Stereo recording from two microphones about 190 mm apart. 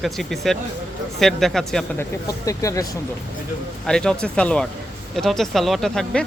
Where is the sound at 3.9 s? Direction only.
5° left (ahead or behind).